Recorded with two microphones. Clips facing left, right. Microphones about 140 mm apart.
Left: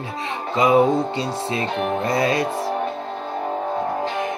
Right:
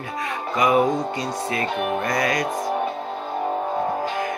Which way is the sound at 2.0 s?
25° left (ahead or behind).